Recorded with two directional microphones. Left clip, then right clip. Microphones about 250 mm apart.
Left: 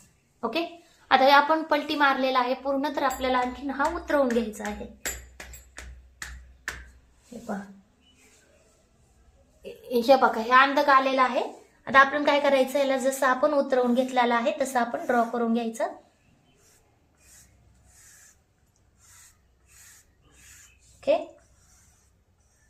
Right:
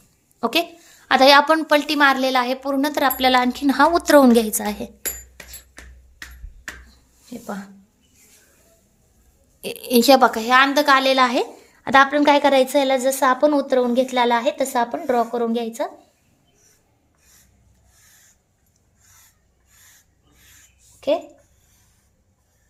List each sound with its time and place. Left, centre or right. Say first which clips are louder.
0.3 s a sound: right 8 dB; right
1.0 s a woman's voice: right 6 dB; right
9.8 s a woman's voice: right 6 dB; right